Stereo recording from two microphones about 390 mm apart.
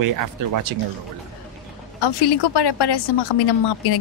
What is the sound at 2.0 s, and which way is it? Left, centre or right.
A woman's voice, left.